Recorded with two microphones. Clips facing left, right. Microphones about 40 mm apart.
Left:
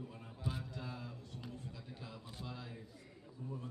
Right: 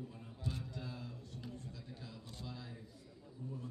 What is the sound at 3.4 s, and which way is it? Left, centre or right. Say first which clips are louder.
Speech: left 1 dB; left.